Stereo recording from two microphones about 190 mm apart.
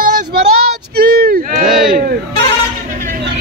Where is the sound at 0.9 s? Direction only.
50° right (ahead or behind).